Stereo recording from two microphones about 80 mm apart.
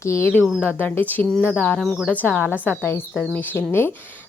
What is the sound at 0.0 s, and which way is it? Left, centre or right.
Speech, left.